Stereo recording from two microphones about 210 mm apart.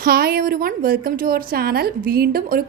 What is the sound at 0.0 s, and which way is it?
A woman's voice, 45° right (ahead or behind).